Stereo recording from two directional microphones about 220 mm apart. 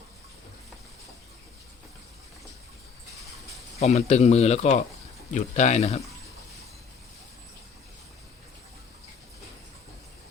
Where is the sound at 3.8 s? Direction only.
30° left (ahead or behind).